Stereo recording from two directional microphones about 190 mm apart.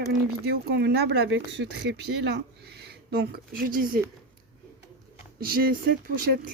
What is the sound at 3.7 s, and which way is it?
Speech, 45° right (ahead or behind).